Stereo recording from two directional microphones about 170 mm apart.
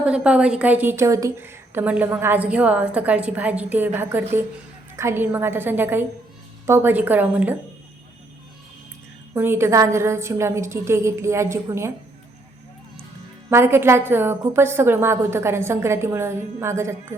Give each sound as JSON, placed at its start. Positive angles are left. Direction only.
{"t": 0.0, "sound": "a woman's voice", "side_deg": -5}
{"t": 9.3, "sound": "a woman's voice", "side_deg": -15}
{"t": 13.5, "sound": "a woman's voice", "side_deg": -15}